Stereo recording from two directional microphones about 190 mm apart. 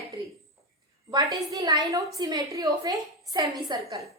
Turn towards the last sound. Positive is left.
turn(degrees=-20)  # may be behind; listen again after turning